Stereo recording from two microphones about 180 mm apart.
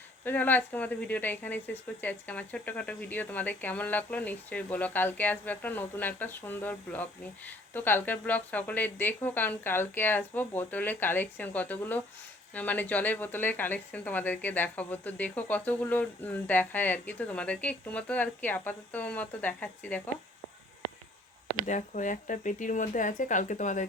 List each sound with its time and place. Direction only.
0.3 s speech: 10° left (ahead or behind)
21.5 s speech: 45° left (ahead or behind)